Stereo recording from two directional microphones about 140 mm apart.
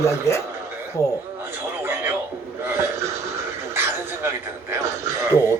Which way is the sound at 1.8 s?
15° right (ahead or behind).